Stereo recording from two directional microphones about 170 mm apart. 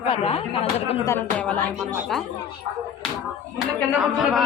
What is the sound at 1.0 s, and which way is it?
Speech, 10° left (ahead or behind).